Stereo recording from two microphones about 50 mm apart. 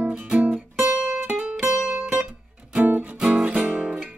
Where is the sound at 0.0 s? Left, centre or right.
Right.